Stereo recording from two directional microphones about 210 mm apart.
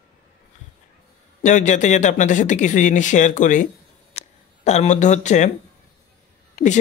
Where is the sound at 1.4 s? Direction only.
35° left (ahead or behind).